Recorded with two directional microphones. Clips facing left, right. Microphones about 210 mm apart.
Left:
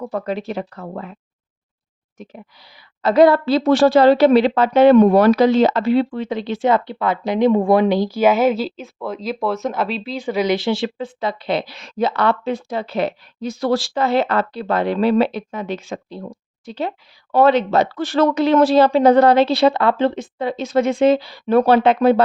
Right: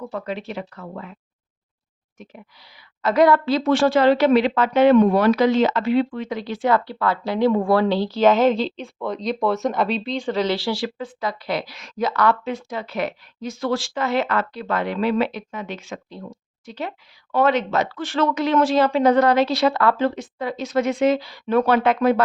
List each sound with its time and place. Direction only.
0.0 s speech: 40° left (ahead or behind)
3.0 s speech: 30° left (ahead or behind)